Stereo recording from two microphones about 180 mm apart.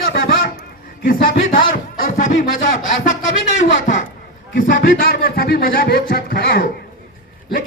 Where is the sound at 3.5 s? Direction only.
45° left (ahead or behind).